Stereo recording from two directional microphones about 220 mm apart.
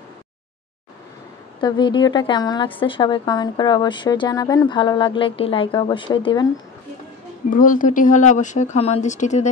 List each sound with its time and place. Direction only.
1.6 s a woman's voice: 20° left (ahead or behind)
7.4 s speech: 35° left (ahead or behind)